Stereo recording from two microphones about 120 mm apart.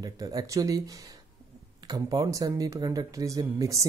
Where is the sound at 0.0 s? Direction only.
30° right (ahead or behind).